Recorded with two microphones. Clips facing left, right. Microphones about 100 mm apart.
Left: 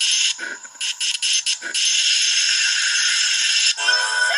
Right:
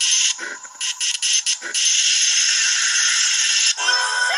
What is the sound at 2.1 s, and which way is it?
Rattle, 30° right (ahead or behind).